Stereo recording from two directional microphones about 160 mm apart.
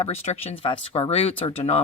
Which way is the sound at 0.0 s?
40° left (ahead or behind).